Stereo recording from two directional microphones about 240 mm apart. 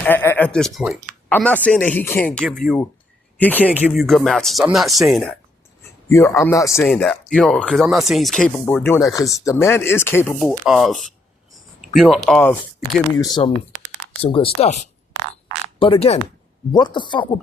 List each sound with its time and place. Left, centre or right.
0.0 s speech: centre
6.1 s speech: centre